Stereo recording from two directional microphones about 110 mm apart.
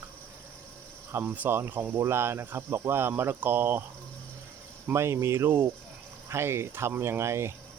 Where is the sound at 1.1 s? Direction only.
15° right (ahead or behind).